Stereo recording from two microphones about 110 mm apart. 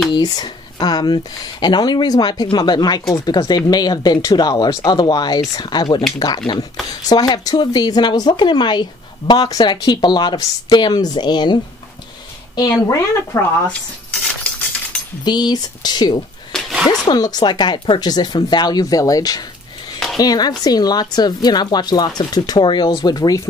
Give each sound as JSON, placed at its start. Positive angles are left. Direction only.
{"t": 0.1, "sound": "a woman's voice", "side_deg": 40}
{"t": 12.5, "sound": "a woman's voice", "side_deg": 30}
{"t": 15.2, "sound": "a woman's voice", "side_deg": 40}
{"t": 16.5, "sound": "a sound", "side_deg": 0}
{"t": 17.0, "sound": "a woman's voice", "side_deg": 35}